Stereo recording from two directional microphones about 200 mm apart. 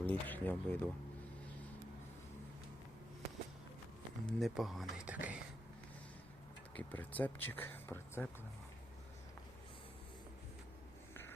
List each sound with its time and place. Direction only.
0.0 s speech: 10° left (ahead or behind)
4.3 s speech: centre (ahead or behind)
6.7 s speech: 10° left (ahead or behind)